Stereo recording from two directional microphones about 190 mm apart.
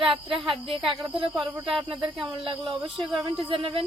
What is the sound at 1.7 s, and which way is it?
Speech, centre (ahead or behind).